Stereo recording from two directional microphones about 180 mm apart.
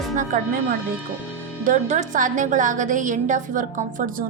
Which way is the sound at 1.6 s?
45° right (ahead or behind).